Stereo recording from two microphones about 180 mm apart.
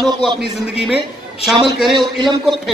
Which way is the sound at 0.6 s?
5° right (ahead or behind).